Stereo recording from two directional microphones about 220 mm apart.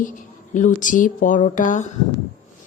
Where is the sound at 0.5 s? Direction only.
35° left (ahead or behind).